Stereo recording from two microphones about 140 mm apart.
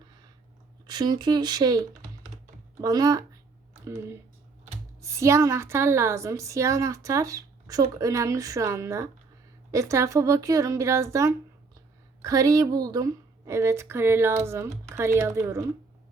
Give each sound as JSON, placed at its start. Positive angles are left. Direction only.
{"t": 0.9, "sound": "a woman's voice", "side_deg": -30}